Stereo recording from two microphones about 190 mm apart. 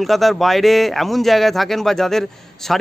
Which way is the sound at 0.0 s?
Centre (ahead or behind).